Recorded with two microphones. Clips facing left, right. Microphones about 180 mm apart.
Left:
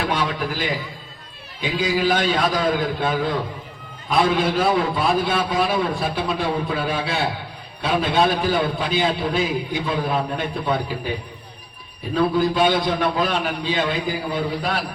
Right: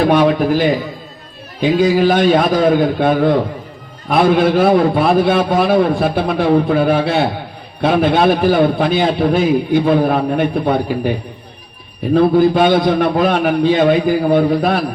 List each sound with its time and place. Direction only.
0.1 s a man's voice: 55° right (ahead or behind)
12.1 s a man's voice: 55° right (ahead or behind)